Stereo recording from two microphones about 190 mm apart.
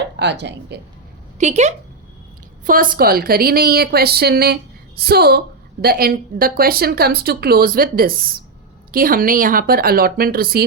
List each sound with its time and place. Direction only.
0.0 s speech: 65° right (ahead or behind)
1.4 s speech: 35° right (ahead or behind)
2.6 s a woman's voice: 45° right (ahead or behind)